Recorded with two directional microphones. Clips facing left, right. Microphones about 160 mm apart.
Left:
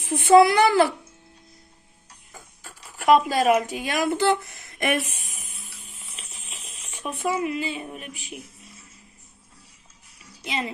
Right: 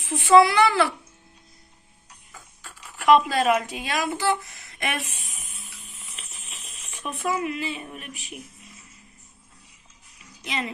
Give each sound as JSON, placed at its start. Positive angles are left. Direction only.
{"t": 0.0, "sound": "a woman's voice", "side_deg": 45}
{"t": 2.3, "sound": "speech", "side_deg": 40}
{"t": 6.1, "sound": "a sound", "side_deg": 30}
{"t": 10.4, "sound": "speech", "side_deg": 30}